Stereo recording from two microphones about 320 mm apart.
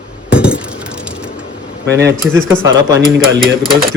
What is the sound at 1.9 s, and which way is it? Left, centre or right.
Speech, right.